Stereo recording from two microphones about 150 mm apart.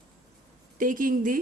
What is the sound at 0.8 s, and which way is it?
Speech, 65° right (ahead or behind).